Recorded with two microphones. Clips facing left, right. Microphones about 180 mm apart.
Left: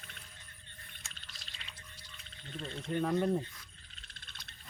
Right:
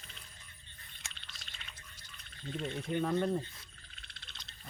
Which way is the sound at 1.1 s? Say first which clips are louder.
Even; 40° left (ahead or behind).